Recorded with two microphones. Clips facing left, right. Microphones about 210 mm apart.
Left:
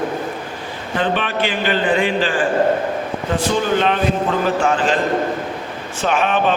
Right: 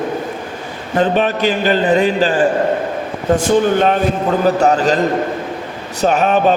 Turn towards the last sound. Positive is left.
turn(degrees=-40)  # may be behind; listen again after turning